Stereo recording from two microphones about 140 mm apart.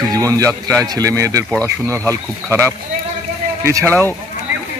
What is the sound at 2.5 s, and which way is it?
Speech, 20° right (ahead or behind).